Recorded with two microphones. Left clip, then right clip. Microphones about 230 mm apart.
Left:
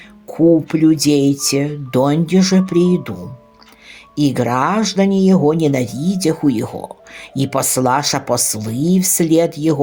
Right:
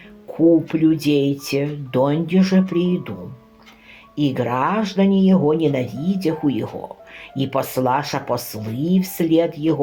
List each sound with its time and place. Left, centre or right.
0.3 s speech: left
4.2 s speech: left